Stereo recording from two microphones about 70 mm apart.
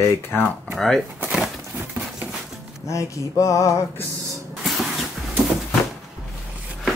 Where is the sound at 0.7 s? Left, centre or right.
Centre.